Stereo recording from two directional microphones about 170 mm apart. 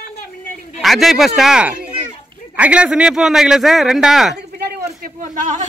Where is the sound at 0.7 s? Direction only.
Centre (ahead or behind).